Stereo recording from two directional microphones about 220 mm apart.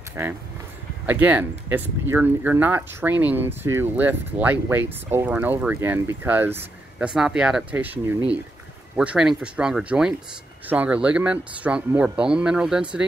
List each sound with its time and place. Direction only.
1.0 s speech: 5° right (ahead or behind)